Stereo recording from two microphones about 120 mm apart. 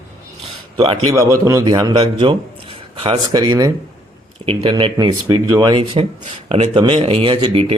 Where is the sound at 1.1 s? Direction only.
25° right (ahead or behind).